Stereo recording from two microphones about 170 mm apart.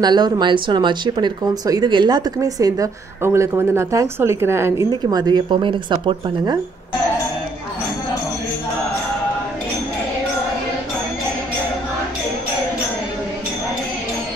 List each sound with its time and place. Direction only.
0.0 s speech: 25° right (ahead or behind)